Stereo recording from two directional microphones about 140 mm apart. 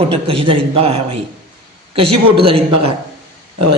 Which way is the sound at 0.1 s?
40° right (ahead or behind).